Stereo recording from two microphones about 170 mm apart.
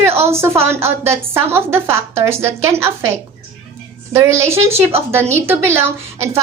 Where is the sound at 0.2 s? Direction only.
15° right (ahead or behind).